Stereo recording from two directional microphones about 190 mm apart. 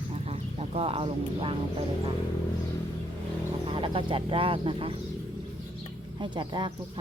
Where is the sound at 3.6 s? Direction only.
25° right (ahead or behind).